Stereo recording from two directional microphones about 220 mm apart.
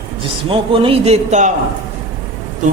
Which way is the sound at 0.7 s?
25° right (ahead or behind).